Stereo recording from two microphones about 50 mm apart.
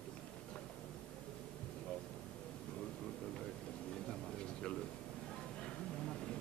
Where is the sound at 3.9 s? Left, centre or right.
Centre.